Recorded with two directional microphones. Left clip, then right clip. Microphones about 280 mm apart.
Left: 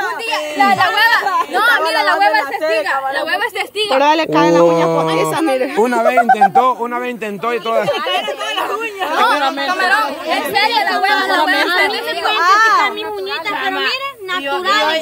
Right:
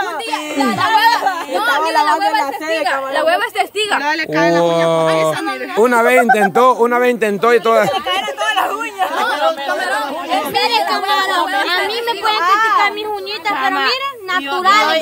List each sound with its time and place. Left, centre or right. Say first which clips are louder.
0.7 s a sound: even; centre
3.3 s a woman's voice: right 1 dB; centre
4.0 s speech: left 7 dB; centre
4.6 s a woman's voice: even; centre
12.4 s a sound: left 3 dB; left
13.5 s chatter: right 4 dB; centre